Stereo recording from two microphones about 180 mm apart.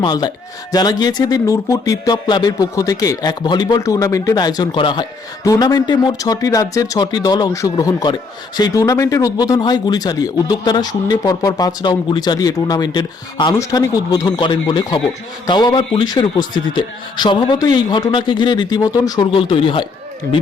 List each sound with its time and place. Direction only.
0.0 s speech: 25° left (ahead or behind)